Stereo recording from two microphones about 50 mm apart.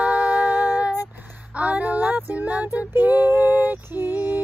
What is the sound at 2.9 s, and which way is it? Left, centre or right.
Female singing, right.